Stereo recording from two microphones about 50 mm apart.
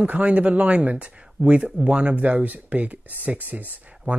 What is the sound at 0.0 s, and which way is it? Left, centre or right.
Speech, right.